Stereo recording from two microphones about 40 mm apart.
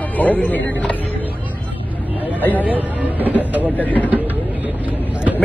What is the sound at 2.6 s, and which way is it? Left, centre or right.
Speech, right.